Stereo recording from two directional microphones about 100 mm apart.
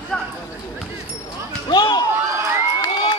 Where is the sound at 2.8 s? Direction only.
45° left (ahead or behind).